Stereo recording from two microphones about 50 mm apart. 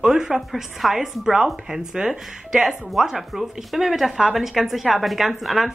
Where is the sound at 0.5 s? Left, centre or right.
Centre.